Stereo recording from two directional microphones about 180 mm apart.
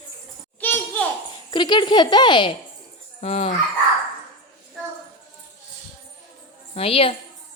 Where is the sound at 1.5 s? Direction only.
25° left (ahead or behind).